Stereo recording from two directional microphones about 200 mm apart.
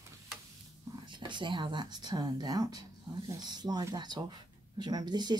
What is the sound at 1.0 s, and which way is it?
Speech, 25° right (ahead or behind).